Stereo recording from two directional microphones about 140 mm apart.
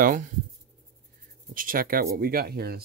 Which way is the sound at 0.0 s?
70° right (ahead or behind).